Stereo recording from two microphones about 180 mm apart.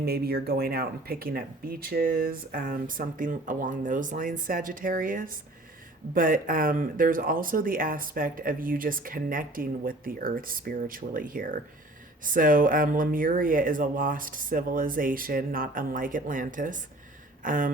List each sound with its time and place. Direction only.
0.0 s speech: 60° right (ahead or behind)